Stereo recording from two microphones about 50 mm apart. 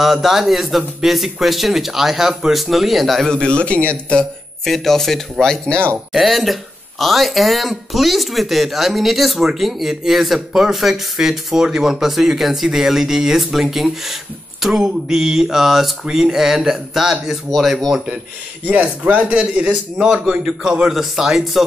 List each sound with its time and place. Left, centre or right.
0.0 s speech: centre
3.3 s a man's voice: centre
4.6 s speech: centre
5.7 s a man's voice: left
6.1 s speech: centre
18.7 s a man's voice: right; by 20.9 s centre
20.9 s speech: centre